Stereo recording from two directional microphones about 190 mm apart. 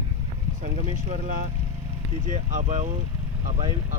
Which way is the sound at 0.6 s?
35° right (ahead or behind).